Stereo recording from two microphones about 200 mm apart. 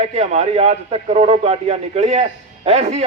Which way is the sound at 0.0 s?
35° right (ahead or behind).